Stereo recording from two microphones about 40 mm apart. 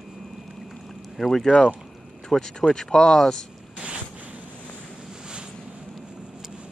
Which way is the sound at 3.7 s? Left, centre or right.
Right.